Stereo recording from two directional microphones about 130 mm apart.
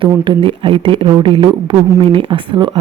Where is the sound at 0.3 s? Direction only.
40° right (ahead or behind).